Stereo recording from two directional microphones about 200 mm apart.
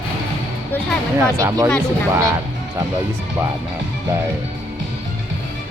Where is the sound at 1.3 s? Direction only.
15° right (ahead or behind).